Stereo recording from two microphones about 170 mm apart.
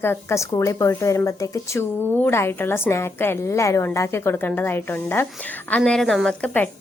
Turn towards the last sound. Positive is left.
turn(degrees=5)  # may be behind; listen again after turning